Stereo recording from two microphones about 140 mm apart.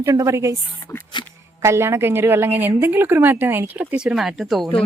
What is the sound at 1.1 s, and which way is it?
Speech, 30° left (ahead or behind).